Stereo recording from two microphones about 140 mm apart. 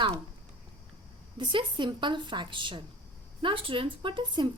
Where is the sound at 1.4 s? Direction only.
35° right (ahead or behind).